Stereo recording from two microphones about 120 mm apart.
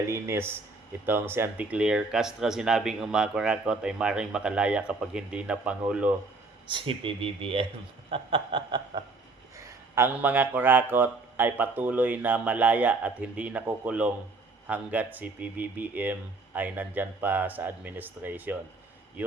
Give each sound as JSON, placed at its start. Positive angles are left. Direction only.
{"t": 0.1, "sound": "speech", "side_deg": -20}
{"t": 6.7, "sound": "speech", "side_deg": -45}
{"t": 9.6, "sound": "speech", "side_deg": -20}